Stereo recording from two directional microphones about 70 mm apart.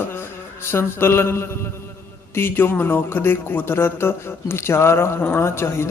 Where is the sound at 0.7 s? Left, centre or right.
Left.